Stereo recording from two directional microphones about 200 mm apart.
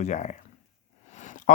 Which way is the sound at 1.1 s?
40° left (ahead or behind).